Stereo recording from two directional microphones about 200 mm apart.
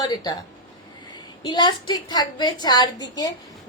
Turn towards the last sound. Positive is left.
turn(degrees=20)  # may be behind; listen again after turning